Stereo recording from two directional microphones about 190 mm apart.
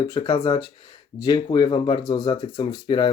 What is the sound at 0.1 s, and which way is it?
Speech, 20° left (ahead or behind).